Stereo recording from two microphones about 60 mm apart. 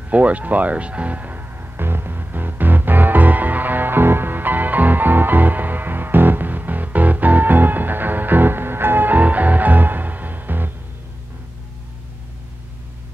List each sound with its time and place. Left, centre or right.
0.1 s music: right